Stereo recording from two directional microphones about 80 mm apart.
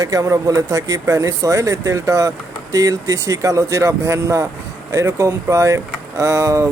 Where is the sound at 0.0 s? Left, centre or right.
Right.